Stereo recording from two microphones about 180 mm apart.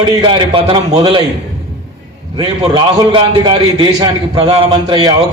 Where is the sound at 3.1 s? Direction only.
30° right (ahead or behind).